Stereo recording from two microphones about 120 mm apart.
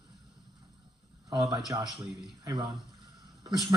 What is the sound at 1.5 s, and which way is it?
Speech, 35° right (ahead or behind).